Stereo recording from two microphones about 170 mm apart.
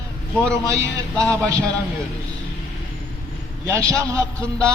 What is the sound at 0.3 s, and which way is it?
Speech, 5° left (ahead or behind).